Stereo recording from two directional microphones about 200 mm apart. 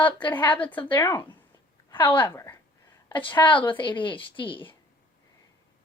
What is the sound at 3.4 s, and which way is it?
A woman's voice, 25° left (ahead or behind).